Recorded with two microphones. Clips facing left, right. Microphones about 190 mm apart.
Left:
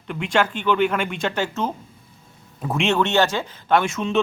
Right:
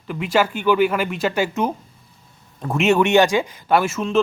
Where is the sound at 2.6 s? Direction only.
Centre (ahead or behind).